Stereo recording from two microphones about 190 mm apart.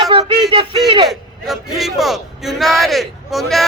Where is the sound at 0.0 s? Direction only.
20° right (ahead or behind).